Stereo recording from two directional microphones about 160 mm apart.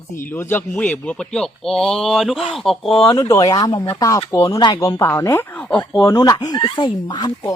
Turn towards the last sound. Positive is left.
turn(degrees=25)  # may be behind; listen again after turning